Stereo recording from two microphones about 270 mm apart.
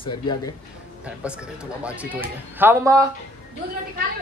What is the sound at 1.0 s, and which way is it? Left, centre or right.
A man's voice, centre.